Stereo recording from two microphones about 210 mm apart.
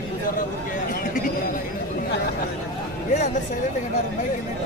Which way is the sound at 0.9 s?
40° left (ahead or behind).